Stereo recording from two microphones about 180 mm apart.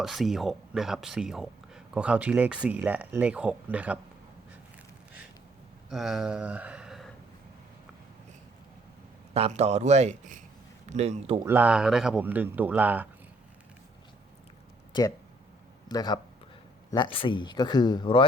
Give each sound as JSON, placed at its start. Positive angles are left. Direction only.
{"t": 0.0, "sound": "speech", "side_deg": 0}
{"t": 5.9, "sound": "speech", "side_deg": 0}
{"t": 9.3, "sound": "speech", "side_deg": -35}
{"t": 11.4, "sound": "speech", "side_deg": -10}
{"t": 15.9, "sound": "speech", "side_deg": 20}